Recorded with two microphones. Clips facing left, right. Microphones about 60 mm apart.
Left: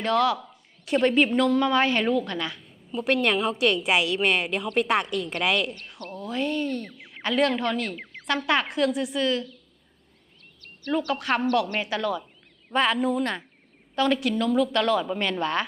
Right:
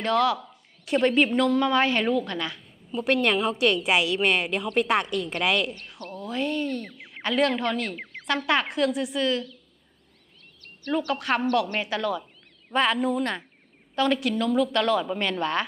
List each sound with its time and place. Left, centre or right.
0.0 s a woman's voice: centre
10.9 s a woman's voice: centre